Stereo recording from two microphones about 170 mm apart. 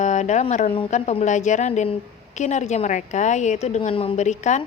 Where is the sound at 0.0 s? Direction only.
45° left (ahead or behind).